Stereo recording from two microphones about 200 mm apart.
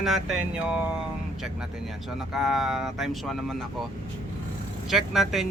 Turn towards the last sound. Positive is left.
turn(degrees=0)  # may be behind; listen again after turning